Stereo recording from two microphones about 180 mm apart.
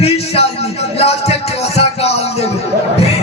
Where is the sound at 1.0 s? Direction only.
35° left (ahead or behind).